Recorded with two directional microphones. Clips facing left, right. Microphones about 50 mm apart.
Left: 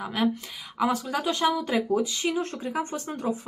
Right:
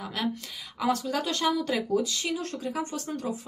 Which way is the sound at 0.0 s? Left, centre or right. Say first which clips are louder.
Left 5 dB; centre.